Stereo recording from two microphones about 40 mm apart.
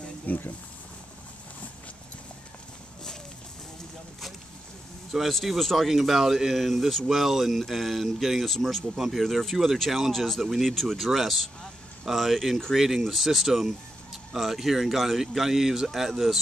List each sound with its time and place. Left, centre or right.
0.3 s speech: left
5.3 s speech: centre